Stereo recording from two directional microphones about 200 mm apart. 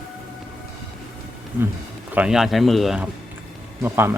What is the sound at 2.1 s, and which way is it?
Speech, 5° right (ahead or behind).